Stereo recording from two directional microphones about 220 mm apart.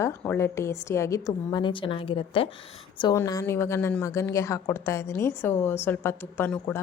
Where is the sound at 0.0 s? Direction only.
10° left (ahead or behind).